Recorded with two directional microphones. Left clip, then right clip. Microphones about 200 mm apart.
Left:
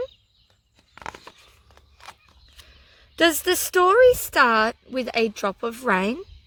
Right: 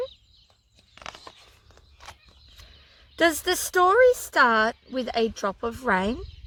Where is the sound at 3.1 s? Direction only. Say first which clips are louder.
Left 3 dB; 40° left (ahead or behind).